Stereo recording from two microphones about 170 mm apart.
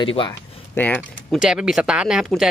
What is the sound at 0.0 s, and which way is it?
Speech, 30° left (ahead or behind).